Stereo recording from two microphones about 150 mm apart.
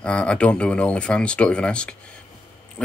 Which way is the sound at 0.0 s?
5° left (ahead or behind).